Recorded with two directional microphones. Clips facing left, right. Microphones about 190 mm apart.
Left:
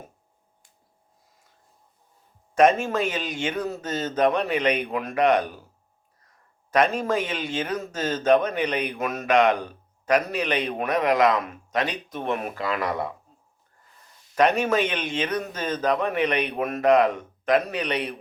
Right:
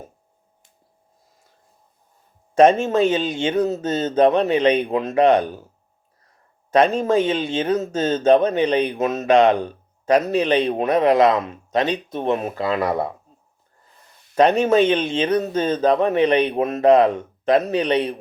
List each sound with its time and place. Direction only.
2.6 s speech: 25° right (ahead or behind)
6.7 s speech: 25° right (ahead or behind)
14.3 s speech: 30° right (ahead or behind)